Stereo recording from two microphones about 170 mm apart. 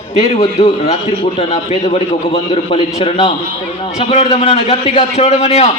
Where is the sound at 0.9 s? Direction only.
40° left (ahead or behind).